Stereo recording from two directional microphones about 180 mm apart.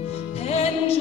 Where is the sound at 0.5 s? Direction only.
35° left (ahead or behind).